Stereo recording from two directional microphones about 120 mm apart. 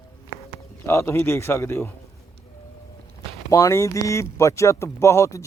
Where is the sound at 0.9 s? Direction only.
20° left (ahead or behind).